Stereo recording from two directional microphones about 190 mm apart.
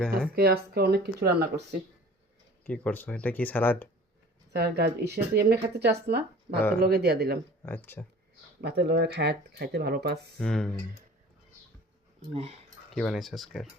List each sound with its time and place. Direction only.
0.3 s speech: 55° right (ahead or behind)
2.6 s speech: 5° left (ahead or behind)
4.5 s speech: 60° right (ahead or behind)
7.6 s speech: 10° left (ahead or behind)
8.6 s speech: 60° right (ahead or behind)
10.4 s speech: 5° left (ahead or behind)
12.3 s speech: 30° right (ahead or behind)
12.9 s speech: centre (ahead or behind)